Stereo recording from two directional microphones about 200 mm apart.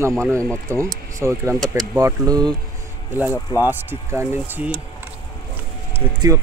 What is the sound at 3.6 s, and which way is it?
Speech, 10° right (ahead or behind).